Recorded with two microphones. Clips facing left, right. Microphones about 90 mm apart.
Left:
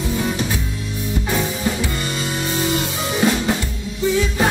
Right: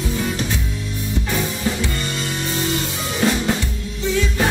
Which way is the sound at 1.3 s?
5° left (ahead or behind).